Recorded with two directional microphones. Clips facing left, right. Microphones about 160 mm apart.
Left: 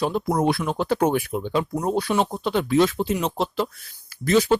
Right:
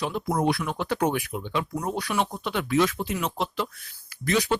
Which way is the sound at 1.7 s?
25° left (ahead or behind).